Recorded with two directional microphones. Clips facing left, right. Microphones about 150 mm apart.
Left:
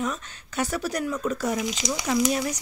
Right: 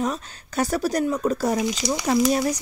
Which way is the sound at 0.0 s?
40° right (ahead or behind).